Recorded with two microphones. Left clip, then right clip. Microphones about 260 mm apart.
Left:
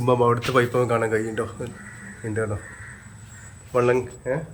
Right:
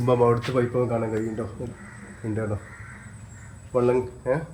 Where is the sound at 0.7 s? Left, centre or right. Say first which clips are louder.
Left 3 dB; centre.